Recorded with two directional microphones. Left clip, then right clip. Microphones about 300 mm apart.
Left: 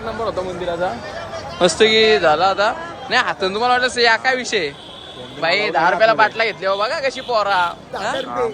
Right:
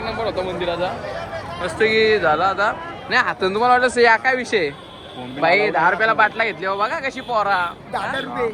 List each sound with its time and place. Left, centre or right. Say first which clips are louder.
0.3 s a man's voice: even; centre